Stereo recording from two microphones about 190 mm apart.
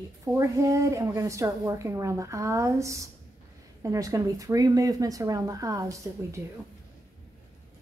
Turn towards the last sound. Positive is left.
turn(degrees=-15)  # may be behind; listen again after turning